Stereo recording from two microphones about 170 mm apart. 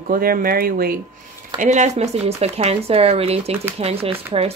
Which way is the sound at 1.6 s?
45° right (ahead or behind).